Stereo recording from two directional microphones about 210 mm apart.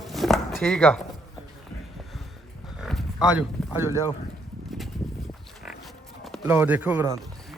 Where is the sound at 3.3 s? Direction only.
10° right (ahead or behind).